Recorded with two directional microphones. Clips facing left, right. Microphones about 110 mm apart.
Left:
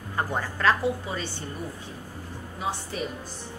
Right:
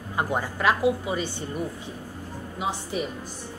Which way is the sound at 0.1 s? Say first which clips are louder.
Right 2 dB; 15° right (ahead or behind).